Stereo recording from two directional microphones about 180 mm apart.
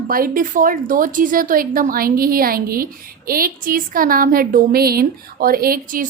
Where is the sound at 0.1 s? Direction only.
50° right (ahead or behind).